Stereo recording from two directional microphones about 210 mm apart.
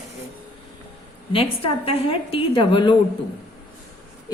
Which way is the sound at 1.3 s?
25° left (ahead or behind).